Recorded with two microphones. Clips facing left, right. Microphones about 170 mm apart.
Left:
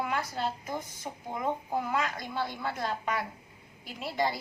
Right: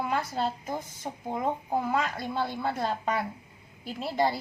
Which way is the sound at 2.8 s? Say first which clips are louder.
Right 1 dB; 30° right (ahead or behind).